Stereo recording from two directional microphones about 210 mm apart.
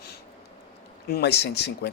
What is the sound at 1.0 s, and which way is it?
Speech, 50° left (ahead or behind).